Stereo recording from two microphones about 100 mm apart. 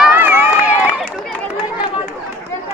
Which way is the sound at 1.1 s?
10° left (ahead or behind).